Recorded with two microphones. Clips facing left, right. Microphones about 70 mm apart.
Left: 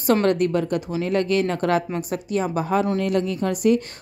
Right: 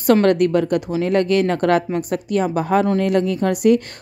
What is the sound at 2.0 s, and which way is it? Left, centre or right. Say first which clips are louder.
Speech: right 4 dB; right.